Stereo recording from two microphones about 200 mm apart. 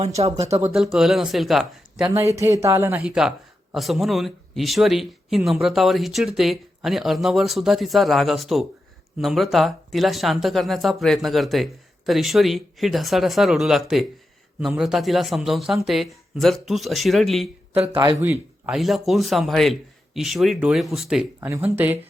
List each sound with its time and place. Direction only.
0.2 s speech: 30° right (ahead or behind)
0.6 s speech: 5° right (ahead or behind)
2.2 s speech: 15° right (ahead or behind); by 17.5 s centre (ahead or behind)
17.7 s a man's voice: 25° right (ahead or behind)
18.2 s speech: 10° right (ahead or behind)